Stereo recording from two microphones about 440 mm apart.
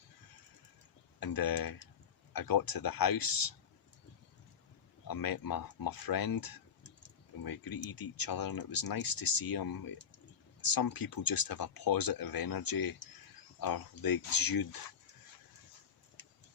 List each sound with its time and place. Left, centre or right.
1.2 s speech: left
5.0 s speech: left